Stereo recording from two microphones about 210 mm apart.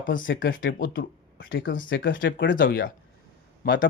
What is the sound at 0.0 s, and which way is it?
Speech, 40° left (ahead or behind).